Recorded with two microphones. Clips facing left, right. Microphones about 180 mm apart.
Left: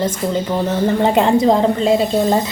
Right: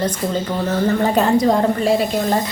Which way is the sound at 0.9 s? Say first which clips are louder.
Left 2 dB; 25° left (ahead or behind).